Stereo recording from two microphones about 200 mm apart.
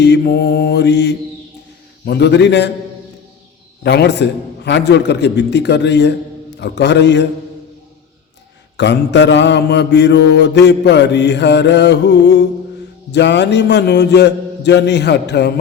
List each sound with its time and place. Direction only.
0.0 s mantra: 55° left (ahead or behind)
3.8 s mantra: 60° left (ahead or behind)
8.8 s mantra: 60° left (ahead or behind)